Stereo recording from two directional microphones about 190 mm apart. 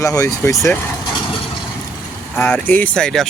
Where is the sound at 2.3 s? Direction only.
10° left (ahead or behind).